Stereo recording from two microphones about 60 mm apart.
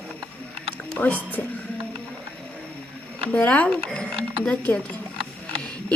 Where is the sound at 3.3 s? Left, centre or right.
Left.